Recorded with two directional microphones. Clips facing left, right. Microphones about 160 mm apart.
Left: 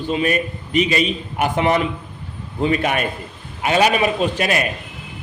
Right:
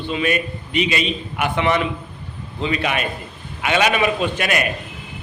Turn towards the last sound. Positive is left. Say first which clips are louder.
# left 2 dB
turn(degrees=30)  # may be behind; listen again after turning